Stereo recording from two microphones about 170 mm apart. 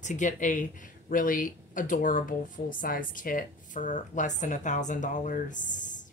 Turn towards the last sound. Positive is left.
turn(degrees=50)  # may be behind; listen again after turning